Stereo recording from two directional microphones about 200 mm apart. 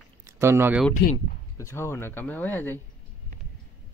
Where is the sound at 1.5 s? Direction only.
15° left (ahead or behind).